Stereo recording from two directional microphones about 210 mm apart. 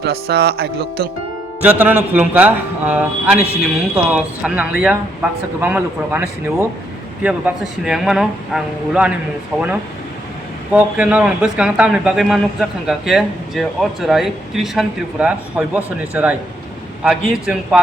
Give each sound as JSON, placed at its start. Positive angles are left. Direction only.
{"t": 0.0, "sound": "speech", "side_deg": -50}
{"t": 1.6, "sound": "speech", "side_deg": -10}
{"t": 10.7, "sound": "speech", "side_deg": -5}